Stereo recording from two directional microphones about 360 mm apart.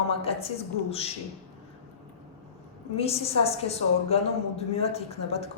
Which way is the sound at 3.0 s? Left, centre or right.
Centre.